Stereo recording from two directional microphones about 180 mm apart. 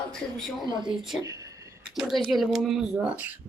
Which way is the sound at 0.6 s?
25° right (ahead or behind).